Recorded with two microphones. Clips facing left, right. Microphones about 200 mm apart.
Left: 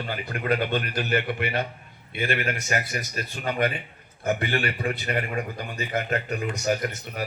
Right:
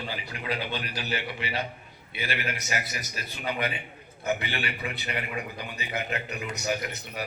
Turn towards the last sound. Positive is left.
turn(degrees=50)  # may be behind; listen again after turning